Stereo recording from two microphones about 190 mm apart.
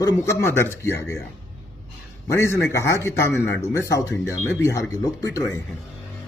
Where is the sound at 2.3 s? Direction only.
15° left (ahead or behind).